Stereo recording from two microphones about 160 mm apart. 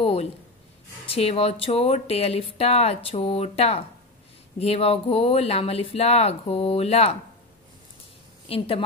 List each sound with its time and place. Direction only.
0.0 s a sound: 40° left (ahead or behind)
1.0 s speech: 35° left (ahead or behind)
8.5 s speech: 35° left (ahead or behind)